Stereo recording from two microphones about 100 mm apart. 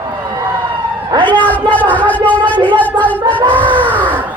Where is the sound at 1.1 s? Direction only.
45° right (ahead or behind).